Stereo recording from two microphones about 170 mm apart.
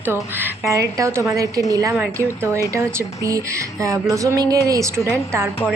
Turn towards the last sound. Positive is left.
turn(degrees=-20)  # may be behind; listen again after turning